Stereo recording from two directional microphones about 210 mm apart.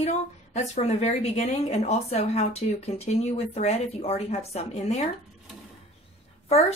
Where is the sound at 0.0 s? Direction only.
35° left (ahead or behind).